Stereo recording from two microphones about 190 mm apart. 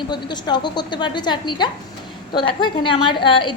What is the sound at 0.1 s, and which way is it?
A woman's voice, 25° left (ahead or behind).